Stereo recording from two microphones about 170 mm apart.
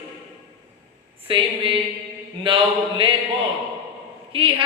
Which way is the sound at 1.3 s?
30° right (ahead or behind).